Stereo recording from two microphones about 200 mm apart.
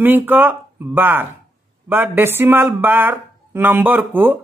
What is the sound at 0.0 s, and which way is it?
Speech, 10° right (ahead or behind).